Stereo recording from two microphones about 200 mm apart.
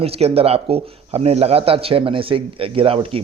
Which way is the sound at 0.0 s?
30° right (ahead or behind).